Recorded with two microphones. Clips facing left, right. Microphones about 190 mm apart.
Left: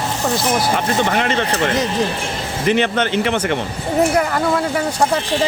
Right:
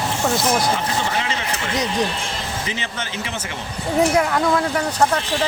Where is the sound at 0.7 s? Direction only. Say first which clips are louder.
Left 5 dB; 60° left (ahead or behind).